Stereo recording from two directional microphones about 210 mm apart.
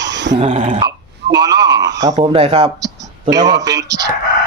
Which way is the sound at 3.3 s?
20° right (ahead or behind).